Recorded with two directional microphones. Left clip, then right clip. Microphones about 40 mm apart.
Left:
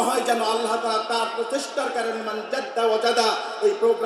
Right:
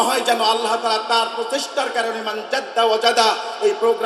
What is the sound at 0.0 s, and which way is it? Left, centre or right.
A man's voice, right.